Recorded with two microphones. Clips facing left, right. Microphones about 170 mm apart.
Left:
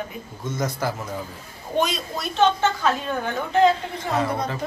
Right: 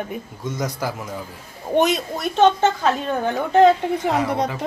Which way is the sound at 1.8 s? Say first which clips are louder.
Right 4 dB; 55° right (ahead or behind).